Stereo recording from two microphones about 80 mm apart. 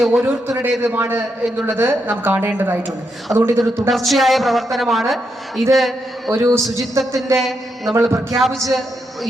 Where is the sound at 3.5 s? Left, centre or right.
Right.